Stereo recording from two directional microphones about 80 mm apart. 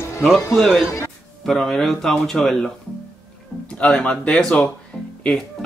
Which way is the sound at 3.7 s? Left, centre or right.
Centre.